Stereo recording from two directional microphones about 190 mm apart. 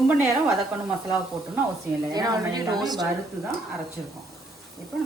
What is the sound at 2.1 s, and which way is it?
Speech, 20° right (ahead or behind).